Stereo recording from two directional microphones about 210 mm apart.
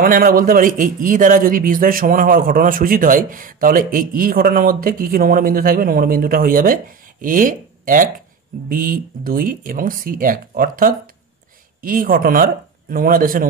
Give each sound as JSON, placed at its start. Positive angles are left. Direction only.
{"t": 0.0, "sound": "a man's voice", "side_deg": -45}